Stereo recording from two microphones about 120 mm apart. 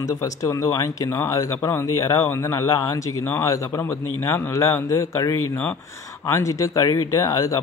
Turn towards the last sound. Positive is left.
turn(degrees=30)  # may be behind; listen again after turning